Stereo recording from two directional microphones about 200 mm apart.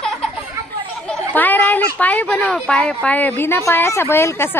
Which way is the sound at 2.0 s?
10° left (ahead or behind).